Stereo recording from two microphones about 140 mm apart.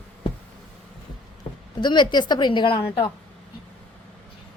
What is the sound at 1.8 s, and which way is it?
Speech, 35° left (ahead or behind).